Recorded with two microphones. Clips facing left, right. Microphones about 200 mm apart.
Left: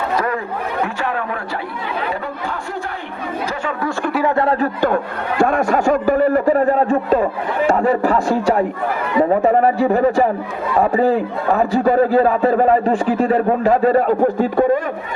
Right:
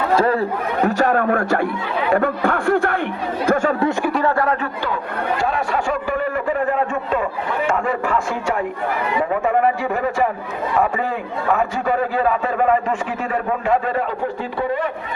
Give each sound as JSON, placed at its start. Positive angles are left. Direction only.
{"t": 0.8, "sound": "a man's voice", "side_deg": -40}
{"t": 3.4, "sound": "a sound", "side_deg": -45}
{"t": 4.6, "sound": "a man's voice", "side_deg": 45}